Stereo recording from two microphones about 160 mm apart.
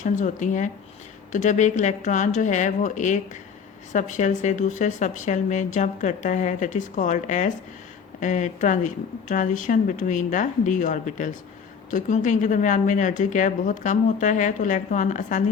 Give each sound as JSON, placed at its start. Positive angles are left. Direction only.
{"t": 0.0, "sound": "speech", "side_deg": 50}